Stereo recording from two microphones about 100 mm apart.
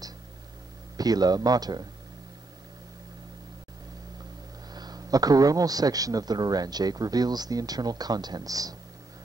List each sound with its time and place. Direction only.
0.9 s a man's voice: 40° right (ahead or behind)
4.7 s a man's voice: 40° right (ahead or behind)